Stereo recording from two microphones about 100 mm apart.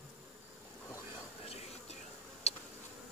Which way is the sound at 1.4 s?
85° left.